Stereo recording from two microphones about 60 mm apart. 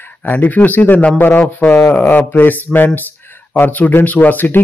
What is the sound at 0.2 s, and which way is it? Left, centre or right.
Speech, left.